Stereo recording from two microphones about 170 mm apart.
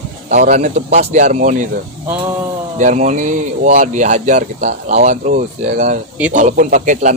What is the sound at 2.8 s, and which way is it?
Speech, 45° right (ahead or behind).